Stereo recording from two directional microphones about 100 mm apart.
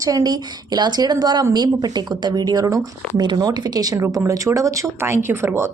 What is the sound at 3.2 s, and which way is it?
Speech, 50° right (ahead or behind).